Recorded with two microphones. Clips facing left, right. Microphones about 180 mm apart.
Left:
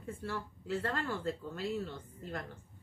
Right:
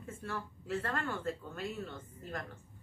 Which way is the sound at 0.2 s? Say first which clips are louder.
Left 1 dB; 30° left (ahead or behind).